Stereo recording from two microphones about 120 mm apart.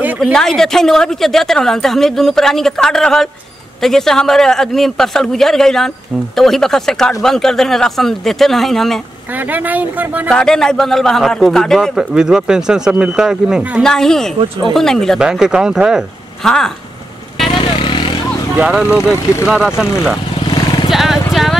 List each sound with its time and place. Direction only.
0.2 s a woman's voice: 5° left (ahead or behind)
9.5 s speech: 15° right (ahead or behind)
10.3 s a woman's voice: 5° left (ahead or behind)
17.6 s vehicle: 45° left (ahead or behind)
18.6 s speech: 10° right (ahead or behind)
18.9 s speech: 20° left (ahead or behind)
19.4 s a woman's voice: 5° right (ahead or behind)
20.9 s horse: centre (ahead or behind)